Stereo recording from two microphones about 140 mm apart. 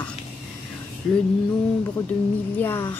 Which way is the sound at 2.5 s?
15° left (ahead or behind).